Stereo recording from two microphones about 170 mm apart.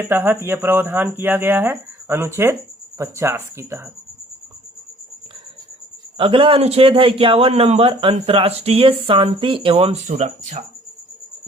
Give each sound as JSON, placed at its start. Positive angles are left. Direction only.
{"t": 0.0, "sound": "speech", "side_deg": -15}
{"t": 6.1, "sound": "a man's voice", "side_deg": -30}